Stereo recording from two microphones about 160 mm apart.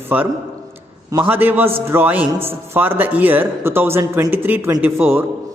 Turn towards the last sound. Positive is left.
turn(degrees=-10)  # may be behind; listen again after turning